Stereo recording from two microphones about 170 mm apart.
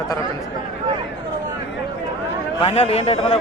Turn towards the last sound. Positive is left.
turn(degrees=35)  # may be behind; listen again after turning